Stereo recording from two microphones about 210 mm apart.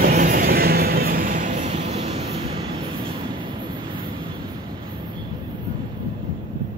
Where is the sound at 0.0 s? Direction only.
40° right (ahead or behind).